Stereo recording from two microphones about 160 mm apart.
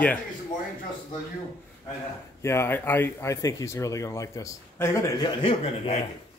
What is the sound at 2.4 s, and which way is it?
Speech, 15° left (ahead or behind).